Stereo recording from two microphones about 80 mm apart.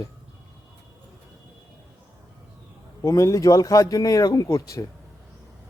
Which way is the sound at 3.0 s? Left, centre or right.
Left.